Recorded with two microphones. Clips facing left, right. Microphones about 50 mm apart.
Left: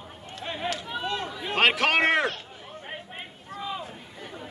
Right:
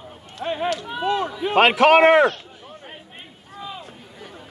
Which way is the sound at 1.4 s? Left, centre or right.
Centre.